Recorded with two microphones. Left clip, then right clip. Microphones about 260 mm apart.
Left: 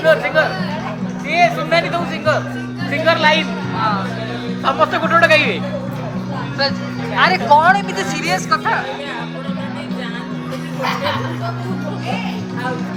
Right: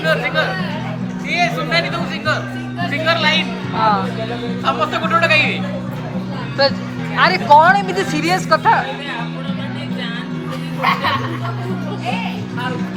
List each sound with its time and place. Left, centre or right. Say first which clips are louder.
0.0 s speech: left 4 dB; left
3.8 s speech: right 4 dB; centre
4.6 s speech: left 3 dB; left
6.6 s speech: right 4 dB; centre